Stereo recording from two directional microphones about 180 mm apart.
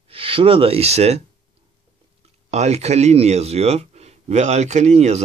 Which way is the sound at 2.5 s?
40° right (ahead or behind).